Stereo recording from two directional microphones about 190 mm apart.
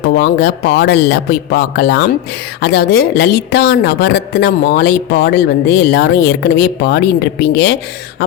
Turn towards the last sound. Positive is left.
turn(degrees=65)  # may be behind; listen again after turning